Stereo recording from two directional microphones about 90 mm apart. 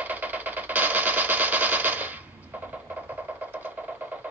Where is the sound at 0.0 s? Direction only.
20° right (ahead or behind).